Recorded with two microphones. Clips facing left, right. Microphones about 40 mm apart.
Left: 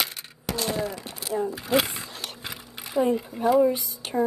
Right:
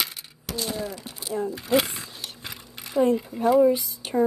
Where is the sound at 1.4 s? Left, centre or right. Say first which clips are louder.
Right 1 dB; centre.